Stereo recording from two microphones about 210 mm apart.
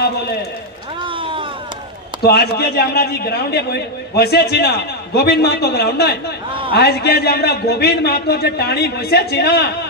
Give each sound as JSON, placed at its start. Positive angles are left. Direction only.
{"t": 0.0, "sound": "a man's voice", "side_deg": 50}
{"t": 1.0, "sound": "a sound", "side_deg": -25}
{"t": 2.2, "sound": "a man's voice", "side_deg": 50}